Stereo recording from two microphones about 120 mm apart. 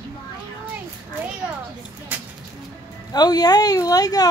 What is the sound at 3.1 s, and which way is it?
Speech, 35° left (ahead or behind).